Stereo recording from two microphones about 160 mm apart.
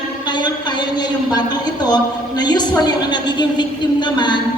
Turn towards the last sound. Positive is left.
turn(degrees=30)  # may be behind; listen again after turning